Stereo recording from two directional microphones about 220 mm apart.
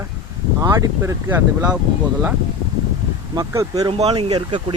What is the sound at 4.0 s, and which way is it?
Speech, 25° right (ahead or behind).